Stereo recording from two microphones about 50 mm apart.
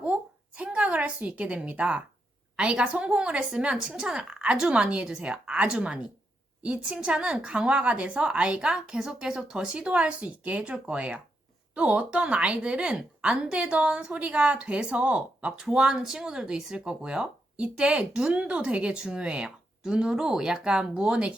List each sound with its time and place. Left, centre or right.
0.0 s a sound: right
2.6 s speech: right
15.6 s speech: centre